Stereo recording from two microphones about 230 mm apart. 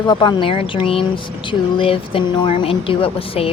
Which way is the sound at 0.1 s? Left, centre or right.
Centre.